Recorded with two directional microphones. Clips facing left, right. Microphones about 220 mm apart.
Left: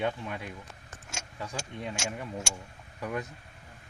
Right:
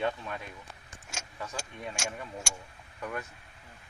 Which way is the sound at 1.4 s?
20° left (ahead or behind).